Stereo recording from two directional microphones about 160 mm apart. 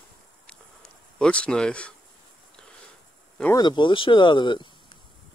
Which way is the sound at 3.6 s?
30° left (ahead or behind).